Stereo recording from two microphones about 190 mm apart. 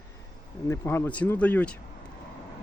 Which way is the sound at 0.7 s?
10° left (ahead or behind).